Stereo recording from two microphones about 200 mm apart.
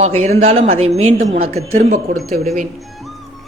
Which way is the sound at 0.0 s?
35° right (ahead or behind).